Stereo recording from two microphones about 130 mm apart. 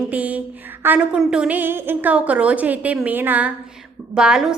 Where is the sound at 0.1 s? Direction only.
10° right (ahead or behind).